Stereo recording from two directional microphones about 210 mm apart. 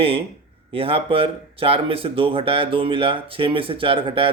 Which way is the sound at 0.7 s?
25° right (ahead or behind).